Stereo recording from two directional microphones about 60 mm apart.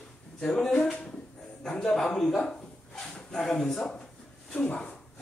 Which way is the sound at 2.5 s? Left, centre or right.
Centre.